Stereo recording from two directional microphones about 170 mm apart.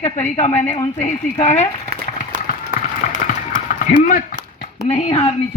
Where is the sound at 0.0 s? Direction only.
40° left (ahead or behind).